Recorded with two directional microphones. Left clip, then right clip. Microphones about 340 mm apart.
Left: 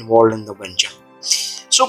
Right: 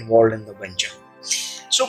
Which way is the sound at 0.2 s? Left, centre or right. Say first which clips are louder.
Left 3 dB; centre.